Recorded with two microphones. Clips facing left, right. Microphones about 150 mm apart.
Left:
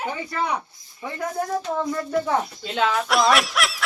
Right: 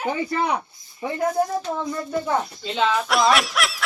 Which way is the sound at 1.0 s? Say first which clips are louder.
Right 5 dB; 25° right (ahead or behind).